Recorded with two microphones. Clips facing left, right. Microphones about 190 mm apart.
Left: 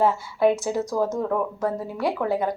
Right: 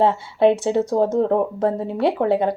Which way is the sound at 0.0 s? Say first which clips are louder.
Right 4 dB; 25° right (ahead or behind).